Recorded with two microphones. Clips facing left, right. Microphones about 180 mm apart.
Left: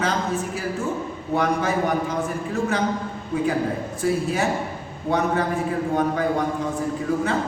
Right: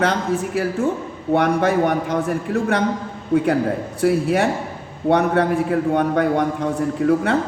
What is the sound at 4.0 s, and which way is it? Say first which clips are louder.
A man's voice: right 6 dB; 65° right (ahead or behind).